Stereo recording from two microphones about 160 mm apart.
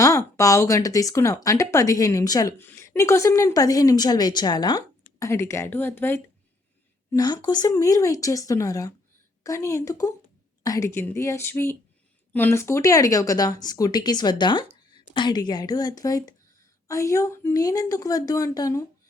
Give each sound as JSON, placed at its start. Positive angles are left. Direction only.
{"t": 0.0, "sound": "a woman's voice", "side_deg": 20}
{"t": 7.1, "sound": "a woman's voice", "side_deg": 25}